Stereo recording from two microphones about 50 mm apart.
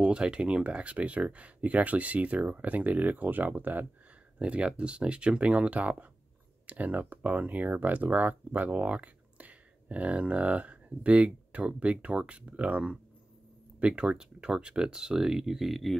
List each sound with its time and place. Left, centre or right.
0.0 s speech: centre; by 3.8 s right
4.4 s speech: right; by 16.0 s centre